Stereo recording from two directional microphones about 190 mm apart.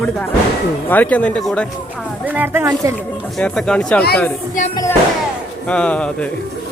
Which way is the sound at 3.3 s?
Centre (ahead or behind).